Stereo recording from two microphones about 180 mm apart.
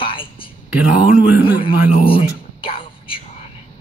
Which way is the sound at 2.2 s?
30° left (ahead or behind).